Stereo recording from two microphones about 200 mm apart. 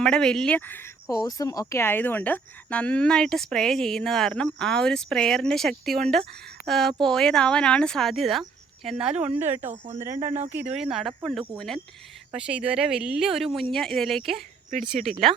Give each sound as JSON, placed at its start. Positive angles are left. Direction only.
{"t": 0.0, "sound": "speech", "side_deg": 5}
{"t": 9.6, "sound": "speech", "side_deg": -35}
{"t": 10.0, "sound": "speech", "side_deg": -15}
{"t": 10.8, "sound": "speech", "side_deg": 0}
{"t": 14.7, "sound": "speech", "side_deg": -40}